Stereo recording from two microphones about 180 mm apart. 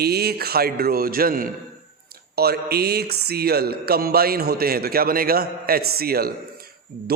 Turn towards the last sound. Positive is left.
turn(degrees=-55)  # may be behind; listen again after turning